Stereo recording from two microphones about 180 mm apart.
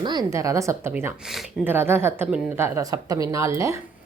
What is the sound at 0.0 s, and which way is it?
Speech, 25° right (ahead or behind).